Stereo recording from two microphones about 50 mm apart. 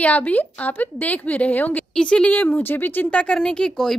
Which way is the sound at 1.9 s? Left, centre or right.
Centre.